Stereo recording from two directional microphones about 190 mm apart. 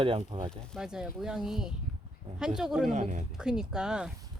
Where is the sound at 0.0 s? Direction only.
30° right (ahead or behind).